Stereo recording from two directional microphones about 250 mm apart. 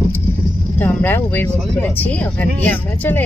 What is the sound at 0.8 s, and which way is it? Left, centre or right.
Speech, centre.